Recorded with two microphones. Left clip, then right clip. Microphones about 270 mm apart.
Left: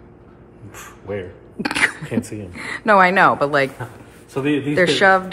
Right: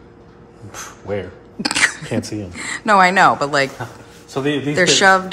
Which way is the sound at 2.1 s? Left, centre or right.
Right.